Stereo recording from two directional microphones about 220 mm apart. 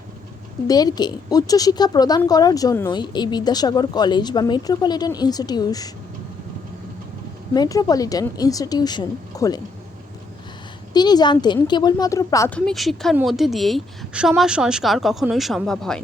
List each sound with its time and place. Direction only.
0.7 s a woman's voice: 15° left (ahead or behind)
7.5 s a woman's voice: 15° left (ahead or behind)
10.9 s a woman's voice: 20° left (ahead or behind); by 16.0 s centre (ahead or behind)